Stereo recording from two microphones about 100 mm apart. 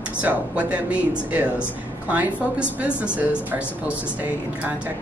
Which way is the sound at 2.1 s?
15° right (ahead or behind).